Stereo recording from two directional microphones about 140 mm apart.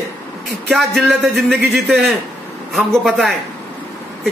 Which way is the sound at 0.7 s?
Centre (ahead or behind).